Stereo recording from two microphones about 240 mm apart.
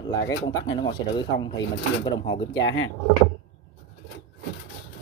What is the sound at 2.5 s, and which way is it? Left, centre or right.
Speech, left.